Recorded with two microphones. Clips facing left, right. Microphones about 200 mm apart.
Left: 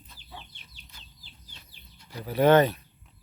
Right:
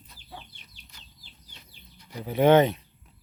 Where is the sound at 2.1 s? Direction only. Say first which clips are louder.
Right 1 dB; 20° right (ahead or behind).